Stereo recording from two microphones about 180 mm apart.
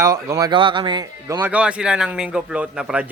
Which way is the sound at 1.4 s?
5° right (ahead or behind).